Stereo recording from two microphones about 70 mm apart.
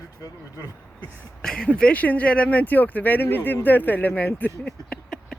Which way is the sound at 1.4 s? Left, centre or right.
Centre.